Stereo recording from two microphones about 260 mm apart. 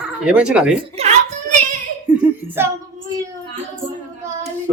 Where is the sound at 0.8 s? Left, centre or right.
Right.